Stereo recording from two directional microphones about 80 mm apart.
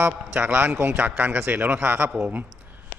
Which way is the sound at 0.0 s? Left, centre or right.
Right.